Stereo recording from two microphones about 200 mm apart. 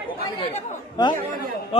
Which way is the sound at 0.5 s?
20° left (ahead or behind).